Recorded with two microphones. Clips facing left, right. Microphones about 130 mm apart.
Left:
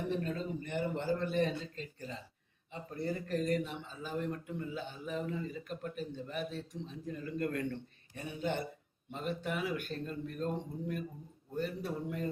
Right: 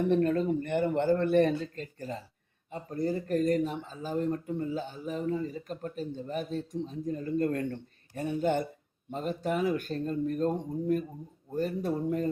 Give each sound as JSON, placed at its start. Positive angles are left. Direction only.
{"t": 0.1, "sound": "a man's voice", "side_deg": -60}